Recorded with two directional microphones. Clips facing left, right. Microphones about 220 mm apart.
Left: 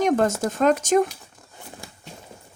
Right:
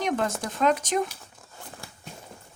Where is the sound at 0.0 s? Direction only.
45° left (ahead or behind).